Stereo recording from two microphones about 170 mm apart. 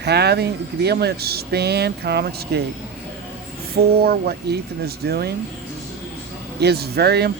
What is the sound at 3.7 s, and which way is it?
Speech, 65° right (ahead or behind).